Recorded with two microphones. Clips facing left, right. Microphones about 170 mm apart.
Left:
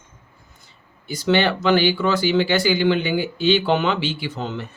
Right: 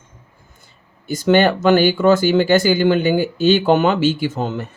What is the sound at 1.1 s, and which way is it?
Speech, 45° right (ahead or behind).